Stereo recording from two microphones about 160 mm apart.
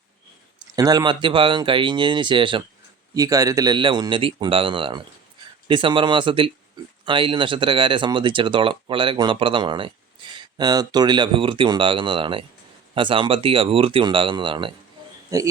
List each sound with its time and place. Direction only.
0.8 s speech: 25° right (ahead or behind)
3.2 s speech: 20° right (ahead or behind)
15.3 s speech: 20° right (ahead or behind)